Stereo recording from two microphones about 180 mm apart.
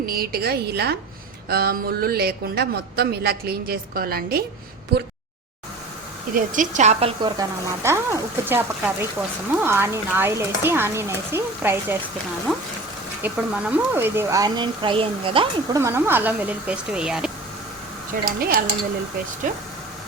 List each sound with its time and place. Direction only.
0.0 s speech: 55° right (ahead or behind)
6.3 s a woman's voice: 45° right (ahead or behind)
7.3 s speech: 20° right (ahead or behind)
12.5 s speech: centre (ahead or behind); by 15.8 s 30° right (ahead or behind)
15.8 s speech: 15° right (ahead or behind)
18.1 s a woman's voice: 55° right (ahead or behind)